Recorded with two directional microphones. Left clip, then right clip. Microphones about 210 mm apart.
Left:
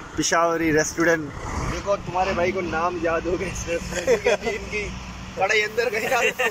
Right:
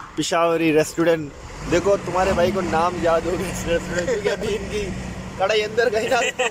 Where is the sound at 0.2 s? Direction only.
5° right (ahead or behind).